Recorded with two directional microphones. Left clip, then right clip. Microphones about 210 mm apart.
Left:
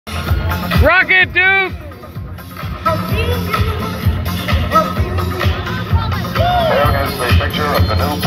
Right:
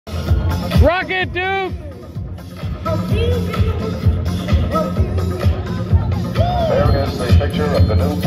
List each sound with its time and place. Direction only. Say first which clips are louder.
0.1 s music: left 4 dB; 55° right (ahead or behind)
0.8 s speech: left 7 dB; 20° right (ahead or behind)
2.8 s music: left 4 dB; 55° right (ahead or behind)